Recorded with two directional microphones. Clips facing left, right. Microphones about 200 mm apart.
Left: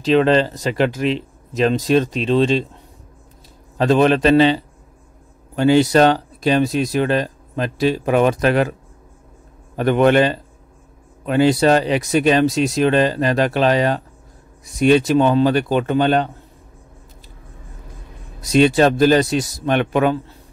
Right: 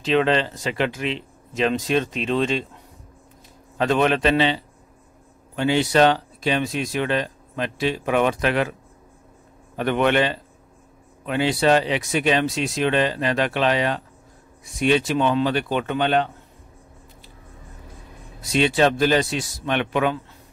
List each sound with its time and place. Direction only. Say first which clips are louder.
0.0 s speech: left 5 dB; 40° left (ahead or behind)
3.7 s speech: left 5 dB; 35° left (ahead or behind)
5.6 s speech: left 5 dB; 40° left (ahead or behind)
9.8 s speech: left 6 dB; 40° left (ahead or behind)
18.4 s speech: left 5 dB; 40° left (ahead or behind)